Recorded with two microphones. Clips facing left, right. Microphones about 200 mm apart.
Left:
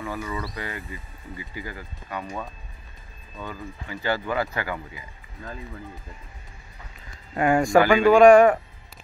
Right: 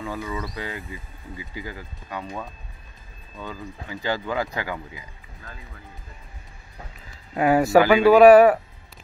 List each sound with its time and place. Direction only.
0.0 s a sound: 15° right (ahead or behind)
0.6 s speech: 15° right (ahead or behind)
3.9 s speech: 15° right (ahead or behind)
7.3 s speech: 5° right (ahead or behind)